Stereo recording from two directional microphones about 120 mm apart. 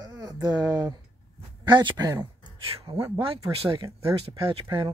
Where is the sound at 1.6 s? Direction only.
40° right (ahead or behind).